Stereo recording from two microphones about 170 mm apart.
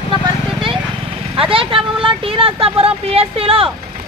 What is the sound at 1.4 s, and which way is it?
Vehicle, 30° right (ahead or behind).